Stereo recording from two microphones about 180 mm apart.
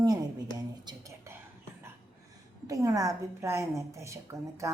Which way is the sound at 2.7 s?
20° right (ahead or behind).